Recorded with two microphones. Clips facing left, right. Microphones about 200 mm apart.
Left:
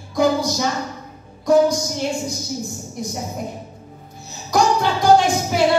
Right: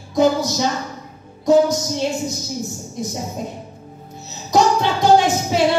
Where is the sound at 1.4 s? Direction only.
20° right (ahead or behind).